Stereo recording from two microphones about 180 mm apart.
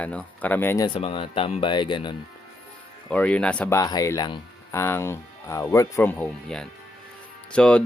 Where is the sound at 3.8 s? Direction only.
20° left (ahead or behind).